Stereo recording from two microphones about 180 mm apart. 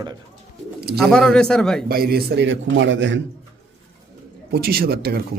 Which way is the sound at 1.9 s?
55° right (ahead or behind).